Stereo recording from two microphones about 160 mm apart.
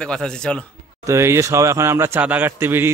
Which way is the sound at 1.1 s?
15° right (ahead or behind).